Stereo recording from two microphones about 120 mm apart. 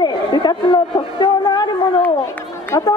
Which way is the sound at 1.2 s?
35° left (ahead or behind).